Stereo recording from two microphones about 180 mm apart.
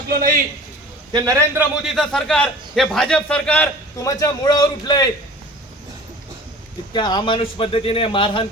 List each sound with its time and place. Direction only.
0.1 s a man's voice: 50° right (ahead or behind)
1.1 s a man's voice: 20° right (ahead or behind)
1.7 s a man's voice: centre (ahead or behind); by 5.0 s 20° left (ahead or behind)
6.9 s a man's voice: 25° left (ahead or behind)